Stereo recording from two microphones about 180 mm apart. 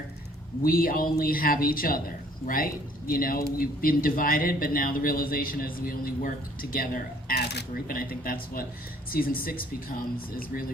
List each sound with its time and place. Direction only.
0.6 s a man's voice: 55° left (ahead or behind)
3.1 s a man's voice: 55° left (ahead or behind)